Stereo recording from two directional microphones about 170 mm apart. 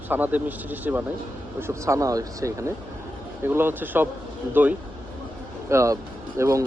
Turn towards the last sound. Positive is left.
turn(degrees=-20)  # may be behind; listen again after turning